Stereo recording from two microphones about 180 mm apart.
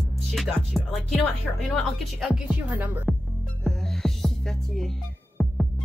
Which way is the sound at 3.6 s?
5° left (ahead or behind).